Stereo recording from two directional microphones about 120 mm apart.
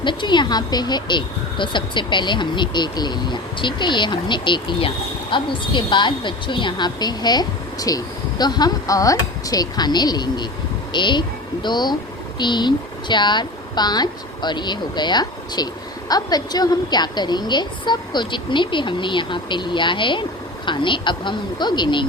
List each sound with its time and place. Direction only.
0.0 s speech: 40° left (ahead or behind)